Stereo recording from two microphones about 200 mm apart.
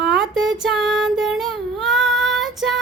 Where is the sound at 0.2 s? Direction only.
Centre (ahead or behind).